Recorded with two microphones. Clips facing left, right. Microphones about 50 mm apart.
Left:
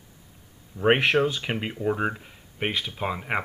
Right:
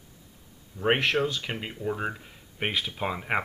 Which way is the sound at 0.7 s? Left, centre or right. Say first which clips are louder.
Left 4 dB; centre.